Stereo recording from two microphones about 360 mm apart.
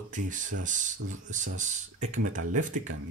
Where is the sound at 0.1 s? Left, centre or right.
Right.